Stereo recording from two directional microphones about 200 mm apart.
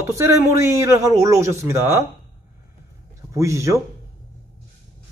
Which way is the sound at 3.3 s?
15° right (ahead or behind).